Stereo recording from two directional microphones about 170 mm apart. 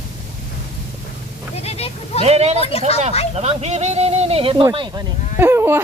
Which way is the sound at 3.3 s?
40° right (ahead or behind).